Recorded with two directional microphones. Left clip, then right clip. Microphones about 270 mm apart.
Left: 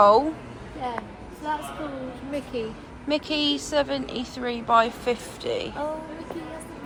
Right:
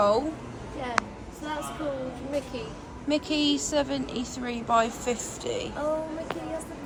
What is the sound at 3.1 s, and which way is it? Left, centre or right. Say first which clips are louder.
A woman's voice: left 1 dB; centre.